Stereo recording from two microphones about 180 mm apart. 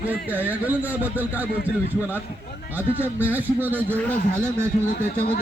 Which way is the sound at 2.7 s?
10° right (ahead or behind).